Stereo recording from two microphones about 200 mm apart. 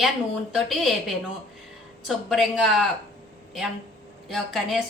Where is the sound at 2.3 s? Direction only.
Centre (ahead or behind).